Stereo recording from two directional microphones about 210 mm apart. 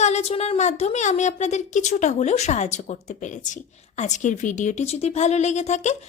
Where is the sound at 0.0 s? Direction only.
30° left (ahead or behind).